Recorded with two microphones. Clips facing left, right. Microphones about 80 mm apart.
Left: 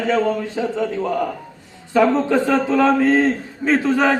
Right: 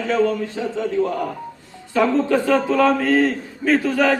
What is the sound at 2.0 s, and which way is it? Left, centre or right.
A man's voice, left.